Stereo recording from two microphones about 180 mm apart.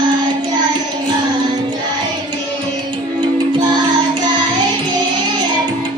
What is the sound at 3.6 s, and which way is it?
Music, 25° right (ahead or behind).